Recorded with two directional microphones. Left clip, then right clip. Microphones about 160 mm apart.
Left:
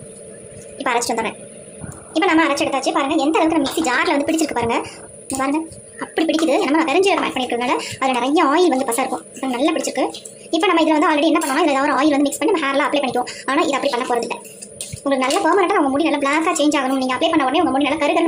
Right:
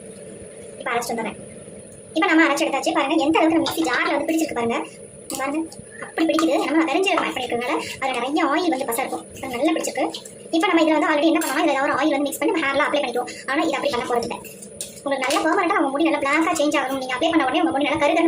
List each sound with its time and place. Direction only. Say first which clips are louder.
0.9 s a woman's voice: left 5 dB; 40° left (ahead or behind)
2.1 s a woman's voice: left 1 dB; 30° left (ahead or behind)
6.1 s a woman's voice: left 2 dB; 35° left (ahead or behind)